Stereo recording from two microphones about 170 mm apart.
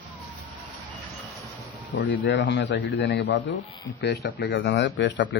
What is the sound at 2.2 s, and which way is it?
A man's voice, 90° left.